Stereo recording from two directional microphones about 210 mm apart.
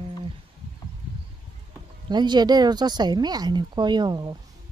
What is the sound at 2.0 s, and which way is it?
Speech, 20° right (ahead or behind).